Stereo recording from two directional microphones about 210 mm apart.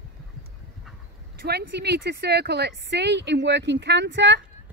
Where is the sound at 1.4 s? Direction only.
55° right (ahead or behind).